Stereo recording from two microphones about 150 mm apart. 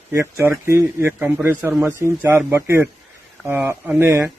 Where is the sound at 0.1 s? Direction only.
15° right (ahead or behind).